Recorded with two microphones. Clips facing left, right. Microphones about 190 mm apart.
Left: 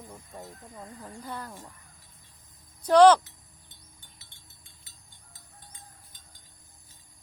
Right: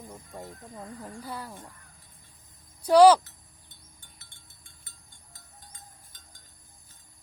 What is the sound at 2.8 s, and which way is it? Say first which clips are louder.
Speech: right 1 dB; 10° right (ahead or behind).